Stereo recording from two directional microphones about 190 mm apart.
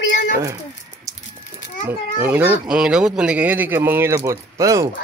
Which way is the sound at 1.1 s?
15° right (ahead or behind).